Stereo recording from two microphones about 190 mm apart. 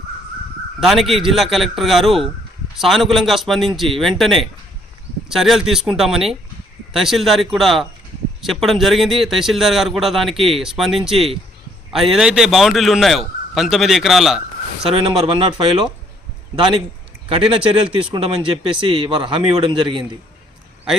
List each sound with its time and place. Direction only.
0.8 s a man's voice: centre (ahead or behind)
15.3 s speech: 25° right (ahead or behind)